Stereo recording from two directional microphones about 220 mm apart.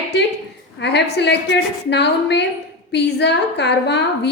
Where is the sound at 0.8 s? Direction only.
50° left (ahead or behind).